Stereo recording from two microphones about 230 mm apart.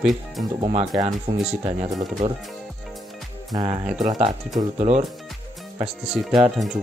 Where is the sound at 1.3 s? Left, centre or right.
Right.